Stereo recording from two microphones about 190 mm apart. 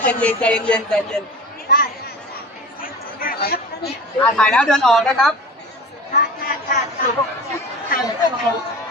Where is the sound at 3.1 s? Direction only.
50° left (ahead or behind).